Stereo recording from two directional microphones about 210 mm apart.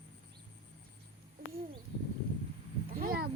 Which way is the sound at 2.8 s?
45° right (ahead or behind).